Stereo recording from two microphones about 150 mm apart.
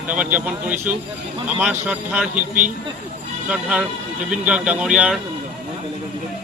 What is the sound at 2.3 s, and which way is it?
Speech, 60° right (ahead or behind).